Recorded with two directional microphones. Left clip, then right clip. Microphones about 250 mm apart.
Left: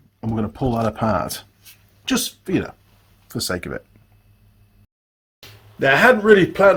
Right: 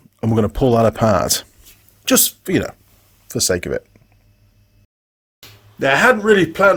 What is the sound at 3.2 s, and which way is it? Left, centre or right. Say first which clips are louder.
Speech: right 7 dB; right.